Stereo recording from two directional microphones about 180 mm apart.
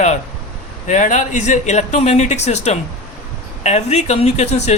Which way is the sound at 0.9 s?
45° left (ahead or behind).